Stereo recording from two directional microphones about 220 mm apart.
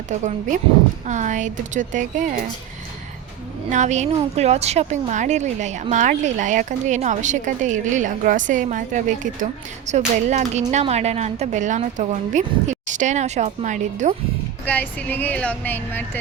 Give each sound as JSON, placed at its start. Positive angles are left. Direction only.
{"t": 0.1, "sound": "a woman's voice", "side_deg": -35}
{"t": 3.7, "sound": "a woman's voice", "side_deg": -35}
{"t": 14.6, "sound": "speech", "side_deg": 10}